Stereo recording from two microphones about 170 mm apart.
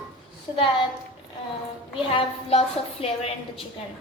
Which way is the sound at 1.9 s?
30° left (ahead or behind).